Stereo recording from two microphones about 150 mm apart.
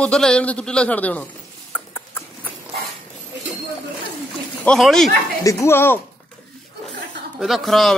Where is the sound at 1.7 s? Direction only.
5° left (ahead or behind).